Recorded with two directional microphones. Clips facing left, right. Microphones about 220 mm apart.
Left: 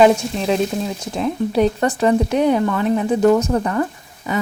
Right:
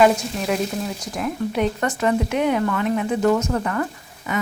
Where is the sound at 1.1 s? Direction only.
30° left (ahead or behind).